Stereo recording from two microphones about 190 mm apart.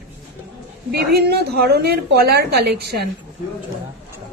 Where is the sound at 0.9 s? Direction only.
55° right (ahead or behind).